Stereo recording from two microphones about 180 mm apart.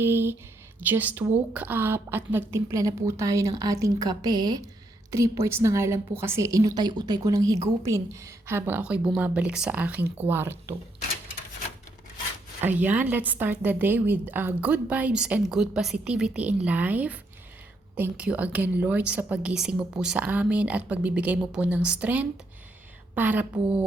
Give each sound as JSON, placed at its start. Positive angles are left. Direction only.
{"t": 0.0, "sound": "a woman's voice", "side_deg": -10}
{"t": 12.6, "sound": "a woman's voice", "side_deg": -10}